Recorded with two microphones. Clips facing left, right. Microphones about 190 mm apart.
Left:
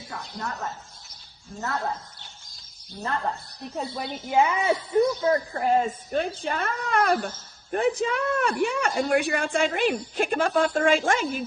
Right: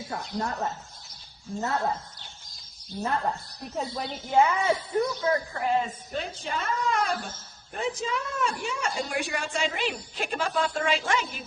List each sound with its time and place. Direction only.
0.1 s speech: 25° right (ahead or behind)
1.6 s speech: 20° right (ahead or behind)
3.2 s a woman's voice: centre (ahead or behind)
4.9 s a woman's voice: 35° left (ahead or behind)